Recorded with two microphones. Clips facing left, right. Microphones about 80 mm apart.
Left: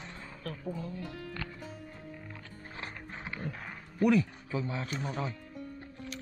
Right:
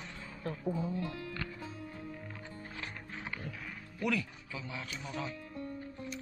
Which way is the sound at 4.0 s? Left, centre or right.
Left.